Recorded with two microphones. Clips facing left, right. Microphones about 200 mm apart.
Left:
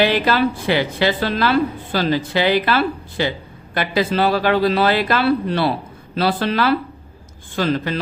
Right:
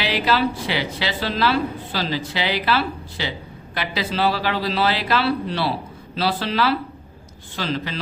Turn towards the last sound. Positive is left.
turn(degrees=50)  # may be behind; listen again after turning